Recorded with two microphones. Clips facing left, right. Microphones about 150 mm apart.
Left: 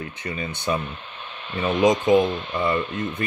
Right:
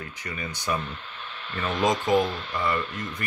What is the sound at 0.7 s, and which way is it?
Speech, 25° left (ahead or behind).